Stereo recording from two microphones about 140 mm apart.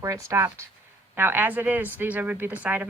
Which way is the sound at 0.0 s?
20° right (ahead or behind).